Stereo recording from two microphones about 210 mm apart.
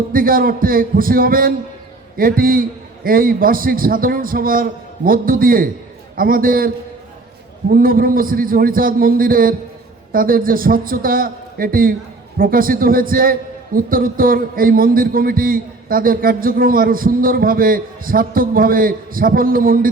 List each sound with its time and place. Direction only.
0.1 s a man's voice: 45° right (ahead or behind)
7.7 s a man's voice: 45° right (ahead or behind)